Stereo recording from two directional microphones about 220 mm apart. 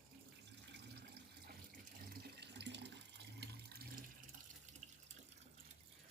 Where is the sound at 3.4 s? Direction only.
45° right (ahead or behind).